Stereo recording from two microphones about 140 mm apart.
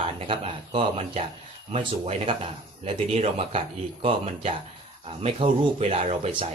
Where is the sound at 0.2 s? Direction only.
40° right (ahead or behind).